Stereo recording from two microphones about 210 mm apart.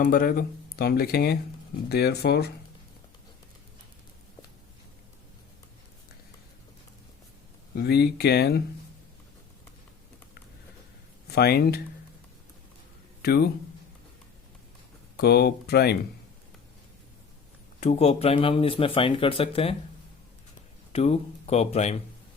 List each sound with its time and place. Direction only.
0.0 s speech: 40° left (ahead or behind)
7.8 s speech: 50° left (ahead or behind)
11.3 s speech: 50° left (ahead or behind)
13.2 s speech: 50° left (ahead or behind)
15.1 s speech: 50° left (ahead or behind)
17.7 s speech: 30° left (ahead or behind)
20.9 s speech: 30° left (ahead or behind)